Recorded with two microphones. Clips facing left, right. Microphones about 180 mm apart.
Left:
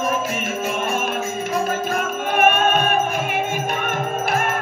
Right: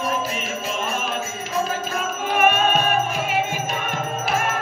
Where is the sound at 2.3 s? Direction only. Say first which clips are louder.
Left 1 dB; 55° left (ahead or behind).